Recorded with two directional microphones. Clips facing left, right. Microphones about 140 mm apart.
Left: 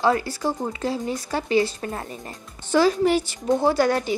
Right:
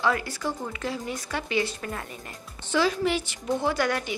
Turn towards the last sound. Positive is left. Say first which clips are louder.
# left 6 dB
turn(degrees=35)  # may be behind; listen again after turning